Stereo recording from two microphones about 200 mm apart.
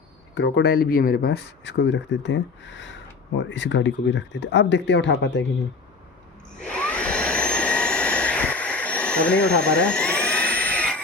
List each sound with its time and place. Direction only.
0.3 s speech: 60° left (ahead or behind)
6.6 s vacuum cleaner: 5° left (ahead or behind)